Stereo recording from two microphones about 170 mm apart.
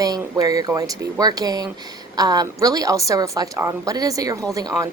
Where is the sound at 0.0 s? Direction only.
20° right (ahead or behind).